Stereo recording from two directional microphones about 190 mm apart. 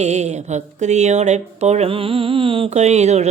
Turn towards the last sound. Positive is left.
turn(degrees=-35)  # may be behind; listen again after turning